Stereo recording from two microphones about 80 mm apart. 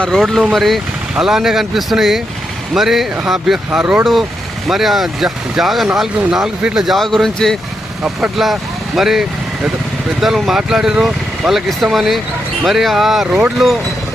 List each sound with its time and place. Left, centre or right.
0.2 s speech: centre